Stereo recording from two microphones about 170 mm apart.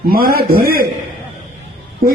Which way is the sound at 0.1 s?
60° right (ahead or behind).